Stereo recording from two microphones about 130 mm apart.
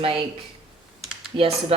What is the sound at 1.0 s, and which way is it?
Computer keyboard, 5° right (ahead or behind).